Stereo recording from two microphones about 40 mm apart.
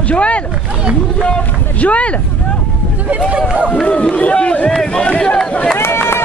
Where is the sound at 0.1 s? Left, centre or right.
Left.